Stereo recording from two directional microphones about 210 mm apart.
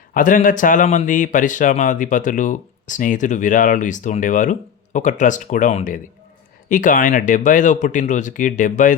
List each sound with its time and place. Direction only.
0.1 s speech: 40° left (ahead or behind)